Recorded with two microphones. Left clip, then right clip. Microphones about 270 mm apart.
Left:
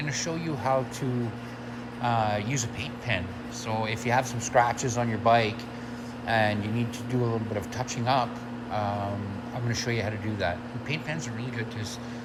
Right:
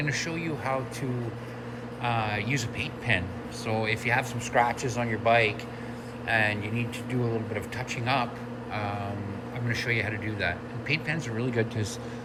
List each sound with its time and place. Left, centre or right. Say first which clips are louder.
0.0 s speech: right 1 dB; centre
2.0 s speech: left 3 dB; centre
9.6 s speech: right 2 dB; centre